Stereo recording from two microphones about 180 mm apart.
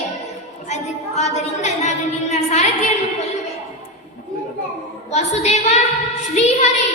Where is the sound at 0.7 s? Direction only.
40° left (ahead or behind).